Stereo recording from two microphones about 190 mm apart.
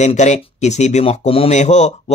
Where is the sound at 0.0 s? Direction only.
35° left (ahead or behind).